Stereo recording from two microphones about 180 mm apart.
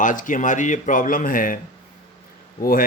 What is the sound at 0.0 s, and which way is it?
Speech, 45° left (ahead or behind).